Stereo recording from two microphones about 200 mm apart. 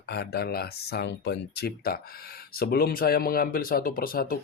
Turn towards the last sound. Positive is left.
turn(degrees=45)  # may be behind; listen again after turning